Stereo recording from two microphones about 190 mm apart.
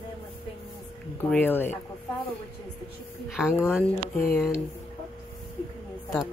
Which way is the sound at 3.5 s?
10° left (ahead or behind).